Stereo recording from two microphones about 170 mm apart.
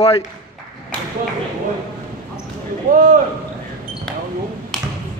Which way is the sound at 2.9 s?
55° right (ahead or behind).